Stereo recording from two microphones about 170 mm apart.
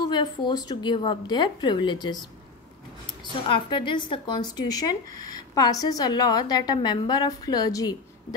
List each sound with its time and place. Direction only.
0.0 s speech: 25° left (ahead or behind)
3.4 s speech: 30° left (ahead or behind)